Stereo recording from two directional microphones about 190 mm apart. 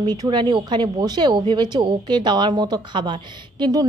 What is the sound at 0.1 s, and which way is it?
Speech, 20° right (ahead or behind).